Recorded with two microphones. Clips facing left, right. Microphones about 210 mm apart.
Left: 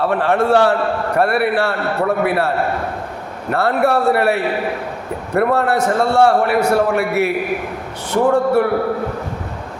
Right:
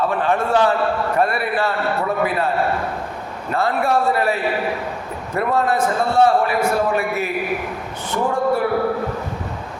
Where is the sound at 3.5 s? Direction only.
65° left (ahead or behind).